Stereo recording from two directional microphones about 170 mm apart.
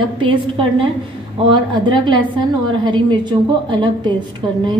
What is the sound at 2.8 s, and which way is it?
A woman's voice, 25° right (ahead or behind).